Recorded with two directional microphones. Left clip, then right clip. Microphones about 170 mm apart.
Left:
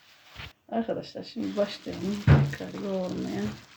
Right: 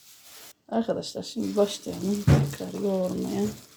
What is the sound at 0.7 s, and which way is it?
Speech, 50° right (ahead or behind).